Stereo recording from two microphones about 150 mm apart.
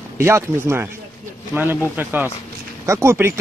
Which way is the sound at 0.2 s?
15° right (ahead or behind).